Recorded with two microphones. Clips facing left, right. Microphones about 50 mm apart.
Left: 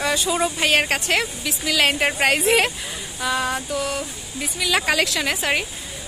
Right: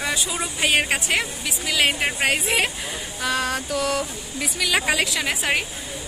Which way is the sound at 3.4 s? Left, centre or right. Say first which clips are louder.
Left 1 dB; left.